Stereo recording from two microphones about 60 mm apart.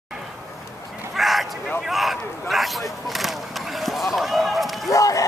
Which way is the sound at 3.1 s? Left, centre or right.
Centre.